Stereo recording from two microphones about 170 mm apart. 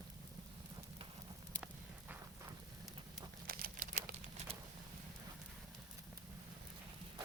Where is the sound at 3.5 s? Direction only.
60° right (ahead or behind); by 4.6 s 45° right (ahead or behind).